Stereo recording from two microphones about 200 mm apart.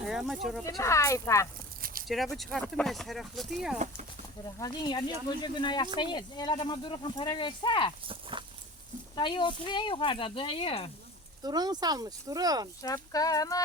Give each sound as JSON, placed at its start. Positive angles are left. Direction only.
{"t": 0.0, "sound": "speech", "side_deg": 0}
{"t": 0.6, "sound": "speech", "side_deg": 15}
{"t": 1.8, "sound": "a sound", "side_deg": -45}
{"t": 2.0, "sound": "speech", "side_deg": 0}
{"t": 4.4, "sound": "speech", "side_deg": 20}
{"t": 8.0, "sound": "speech", "side_deg": -25}
{"t": 9.1, "sound": "speech", "side_deg": 25}
{"t": 11.4, "sound": "speech", "side_deg": -20}
{"t": 12.8, "sound": "speech", "side_deg": 15}